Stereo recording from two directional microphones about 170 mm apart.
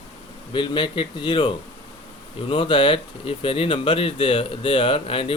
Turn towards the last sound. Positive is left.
turn(degrees=35)  # may be behind; listen again after turning